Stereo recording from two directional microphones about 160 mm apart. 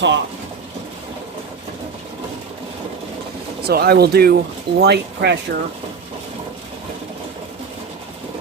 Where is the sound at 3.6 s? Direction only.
80° right.